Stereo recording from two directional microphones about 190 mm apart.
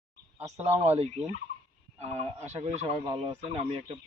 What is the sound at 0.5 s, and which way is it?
Speech, 35° right (ahead or behind).